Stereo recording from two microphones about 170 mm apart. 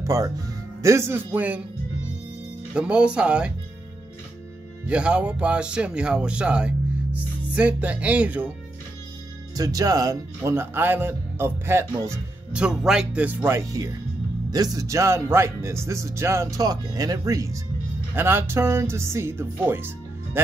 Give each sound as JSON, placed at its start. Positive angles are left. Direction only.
{"t": 0.0, "sound": "speech", "side_deg": -20}
{"t": 2.7, "sound": "speech", "side_deg": -5}
{"t": 4.8, "sound": "speech", "side_deg": -5}
{"t": 9.6, "sound": "speech", "side_deg": -20}
{"t": 12.5, "sound": "speech", "side_deg": -5}